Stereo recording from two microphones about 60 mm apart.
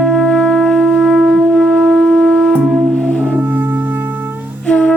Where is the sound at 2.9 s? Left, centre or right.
Centre.